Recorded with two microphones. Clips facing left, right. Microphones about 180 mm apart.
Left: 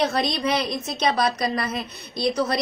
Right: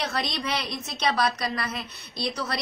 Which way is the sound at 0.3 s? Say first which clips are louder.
Left 7 dB; 20° left (ahead or behind).